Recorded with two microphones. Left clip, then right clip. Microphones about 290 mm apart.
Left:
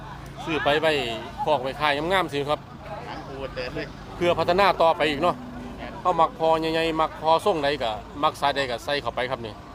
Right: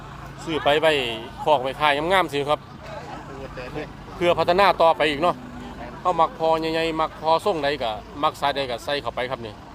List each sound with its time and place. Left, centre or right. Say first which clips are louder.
0.4 s speech: right 3 dB; centre
4.2 s speech: right 2 dB; centre